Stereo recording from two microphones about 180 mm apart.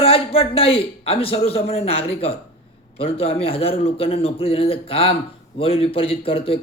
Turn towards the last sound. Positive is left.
turn(degrees=30)  # may be behind; listen again after turning